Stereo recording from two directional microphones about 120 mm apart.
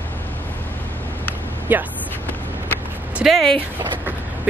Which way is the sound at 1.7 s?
15° right (ahead or behind).